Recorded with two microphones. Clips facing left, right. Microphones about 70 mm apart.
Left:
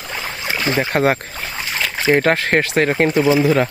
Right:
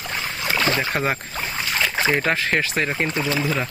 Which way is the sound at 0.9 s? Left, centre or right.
Left.